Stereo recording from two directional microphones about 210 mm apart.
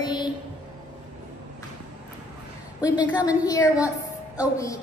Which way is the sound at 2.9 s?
15° left (ahead or behind).